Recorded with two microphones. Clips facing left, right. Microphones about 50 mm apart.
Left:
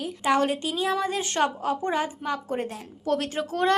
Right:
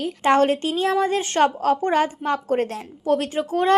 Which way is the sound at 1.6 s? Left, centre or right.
Right.